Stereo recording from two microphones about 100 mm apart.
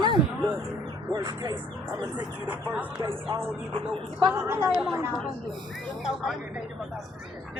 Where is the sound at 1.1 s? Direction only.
40° right (ahead or behind).